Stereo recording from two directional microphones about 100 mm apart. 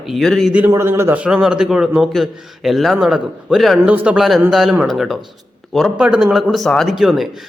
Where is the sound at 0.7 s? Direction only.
25° right (ahead or behind).